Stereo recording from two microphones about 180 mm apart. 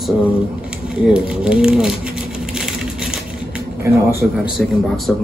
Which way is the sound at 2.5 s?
5° right (ahead or behind).